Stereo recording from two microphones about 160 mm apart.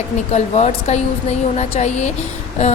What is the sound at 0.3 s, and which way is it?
A woman's voice, 45° left (ahead or behind).